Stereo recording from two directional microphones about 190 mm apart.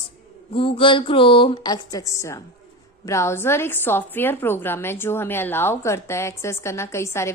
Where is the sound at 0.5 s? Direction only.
30° left (ahead or behind).